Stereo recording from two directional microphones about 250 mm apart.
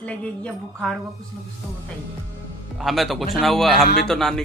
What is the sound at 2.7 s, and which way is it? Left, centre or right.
A woman's voice, centre.